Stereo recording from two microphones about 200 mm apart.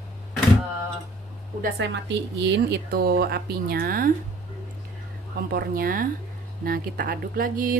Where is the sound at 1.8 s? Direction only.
60° right (ahead or behind); by 4.1 s 45° right (ahead or behind).